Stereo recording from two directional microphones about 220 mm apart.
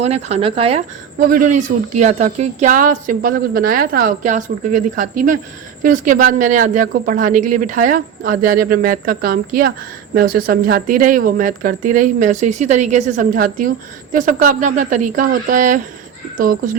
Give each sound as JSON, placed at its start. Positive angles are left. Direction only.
{"t": 0.0, "sound": "speech", "side_deg": -30}